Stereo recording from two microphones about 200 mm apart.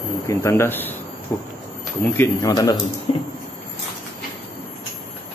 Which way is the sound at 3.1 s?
30° left (ahead or behind).